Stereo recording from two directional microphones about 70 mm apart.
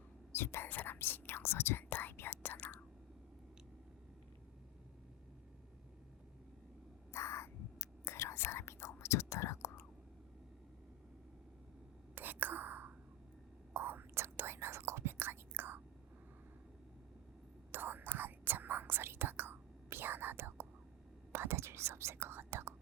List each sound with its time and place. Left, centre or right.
0.3 s speech: left
0.7 s whispering: left
7.1 s whispering: left
12.1 s whispering: right
17.7 s whispering: right